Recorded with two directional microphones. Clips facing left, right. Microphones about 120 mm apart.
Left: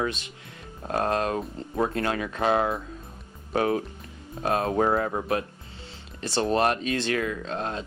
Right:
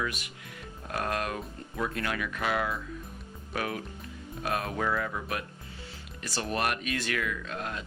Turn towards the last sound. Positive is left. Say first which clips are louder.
# left 6 dB
turn(degrees=30)  # may be behind; listen again after turning